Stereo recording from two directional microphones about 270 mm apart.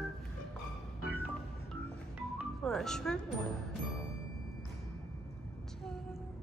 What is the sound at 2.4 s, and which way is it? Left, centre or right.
Music, centre.